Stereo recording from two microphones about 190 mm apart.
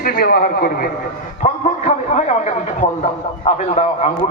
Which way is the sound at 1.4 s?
40° left (ahead or behind).